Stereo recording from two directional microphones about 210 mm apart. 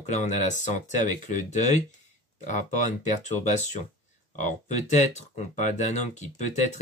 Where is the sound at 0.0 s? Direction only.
35° left (ahead or behind).